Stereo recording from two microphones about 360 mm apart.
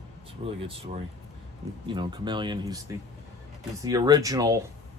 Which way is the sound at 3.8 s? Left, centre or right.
Centre.